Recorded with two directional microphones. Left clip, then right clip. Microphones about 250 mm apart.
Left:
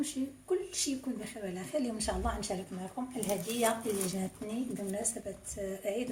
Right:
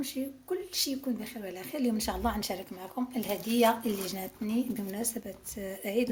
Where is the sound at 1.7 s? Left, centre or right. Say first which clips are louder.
Right 1 dB; right.